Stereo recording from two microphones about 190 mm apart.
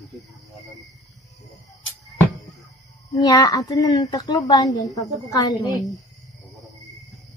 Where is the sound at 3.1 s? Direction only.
20° left (ahead or behind).